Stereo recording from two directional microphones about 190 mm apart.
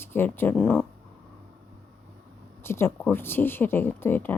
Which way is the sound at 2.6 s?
15° left (ahead or behind).